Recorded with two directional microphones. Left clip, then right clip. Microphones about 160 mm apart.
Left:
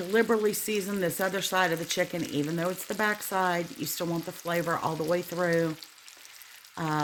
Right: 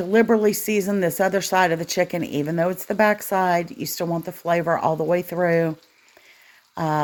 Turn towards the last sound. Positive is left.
turn(degrees=-30)  # may be behind; listen again after turning